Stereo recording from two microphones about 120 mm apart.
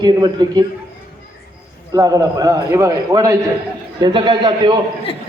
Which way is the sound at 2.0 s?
30° right (ahead or behind).